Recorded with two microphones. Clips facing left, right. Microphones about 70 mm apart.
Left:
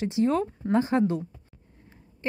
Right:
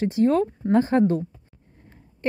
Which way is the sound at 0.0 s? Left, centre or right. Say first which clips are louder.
Right 4 dB; right.